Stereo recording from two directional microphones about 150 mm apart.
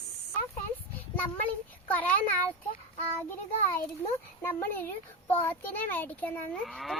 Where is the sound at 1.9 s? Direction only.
10° left (ahead or behind).